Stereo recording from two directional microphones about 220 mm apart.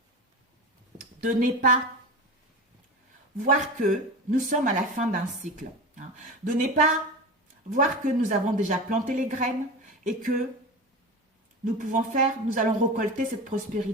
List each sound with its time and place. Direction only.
1.2 s speech: 35° right (ahead or behind)
3.3 s speech: 35° right (ahead or behind)
11.6 s speech: 35° right (ahead or behind)